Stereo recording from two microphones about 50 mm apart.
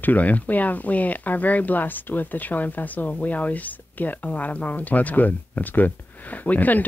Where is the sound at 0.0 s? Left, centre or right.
Left.